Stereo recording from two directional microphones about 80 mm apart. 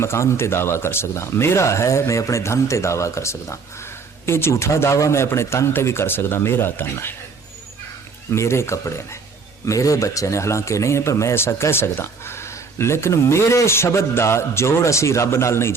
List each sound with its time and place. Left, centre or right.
0.0 s speech: left
8.3 s speech: left